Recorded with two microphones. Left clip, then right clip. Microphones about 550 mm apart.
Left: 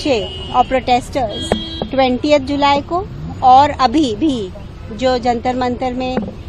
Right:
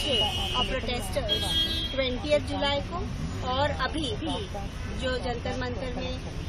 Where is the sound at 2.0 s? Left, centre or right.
Left.